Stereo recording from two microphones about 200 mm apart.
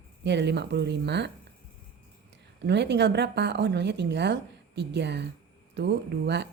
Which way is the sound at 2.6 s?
60° right (ahead or behind).